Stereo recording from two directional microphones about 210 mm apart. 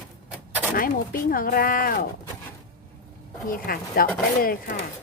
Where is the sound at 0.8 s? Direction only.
40° left (ahead or behind).